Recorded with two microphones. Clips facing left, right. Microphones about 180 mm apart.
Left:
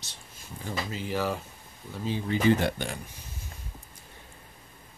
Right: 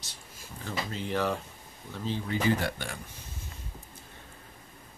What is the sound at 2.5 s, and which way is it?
Speech, 25° left (ahead or behind).